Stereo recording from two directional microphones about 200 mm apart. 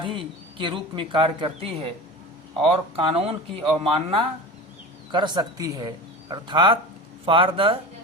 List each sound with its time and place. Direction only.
0.0 s speech: 25° right (ahead or behind)